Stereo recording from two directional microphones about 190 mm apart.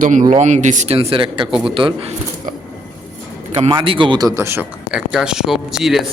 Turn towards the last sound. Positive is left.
turn(degrees=0)  # may be behind; listen again after turning